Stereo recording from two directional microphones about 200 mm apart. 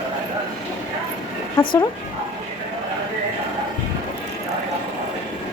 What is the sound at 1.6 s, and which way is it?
Speech, 25° left (ahead or behind).